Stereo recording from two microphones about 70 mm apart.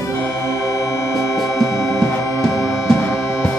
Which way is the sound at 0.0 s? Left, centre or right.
Left.